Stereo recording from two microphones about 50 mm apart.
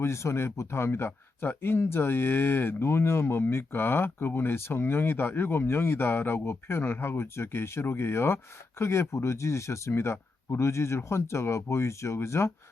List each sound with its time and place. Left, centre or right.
0.0 s speech: left
9.9 s speech: left